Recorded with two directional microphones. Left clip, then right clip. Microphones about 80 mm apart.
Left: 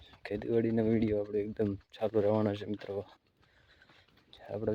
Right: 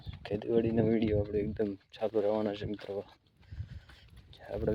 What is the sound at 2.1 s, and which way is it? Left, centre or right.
Speech, left.